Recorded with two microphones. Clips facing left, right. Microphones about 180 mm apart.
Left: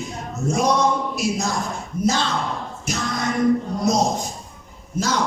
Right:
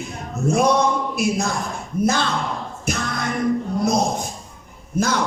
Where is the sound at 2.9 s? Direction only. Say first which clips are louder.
Right 2 dB; 55° right (ahead or behind).